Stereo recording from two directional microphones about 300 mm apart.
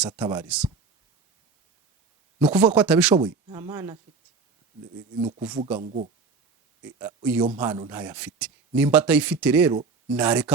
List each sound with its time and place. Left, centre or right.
0.2 s a man's voice: centre
2.4 s a man's voice: centre
5.4 s a man's voice: centre
5.8 s speech: right
6.8 s a man's voice: centre